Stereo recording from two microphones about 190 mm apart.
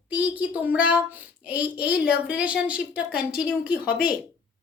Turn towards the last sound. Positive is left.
turn(degrees=50)  # may be behind; listen again after turning